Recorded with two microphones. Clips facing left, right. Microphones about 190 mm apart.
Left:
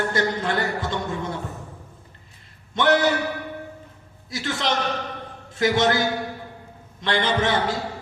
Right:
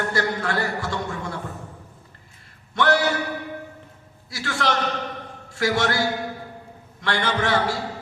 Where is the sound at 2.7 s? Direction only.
20° left (ahead or behind).